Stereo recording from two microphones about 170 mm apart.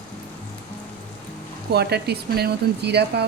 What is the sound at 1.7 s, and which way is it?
Speech, 75° right (ahead or behind).